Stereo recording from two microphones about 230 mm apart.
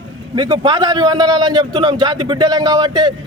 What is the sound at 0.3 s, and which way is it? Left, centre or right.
A man's voice, centre.